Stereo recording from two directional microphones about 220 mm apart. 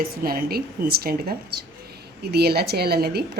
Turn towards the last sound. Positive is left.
turn(degrees=-45)  # may be behind; listen again after turning